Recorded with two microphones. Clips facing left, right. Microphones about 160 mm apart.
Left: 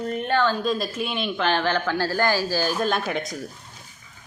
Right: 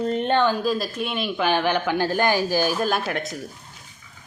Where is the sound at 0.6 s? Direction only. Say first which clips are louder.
Right 1 dB; centre (ahead or behind).